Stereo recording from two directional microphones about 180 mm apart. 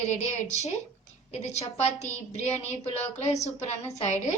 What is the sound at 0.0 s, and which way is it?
A woman's voice, 40° left (ahead or behind).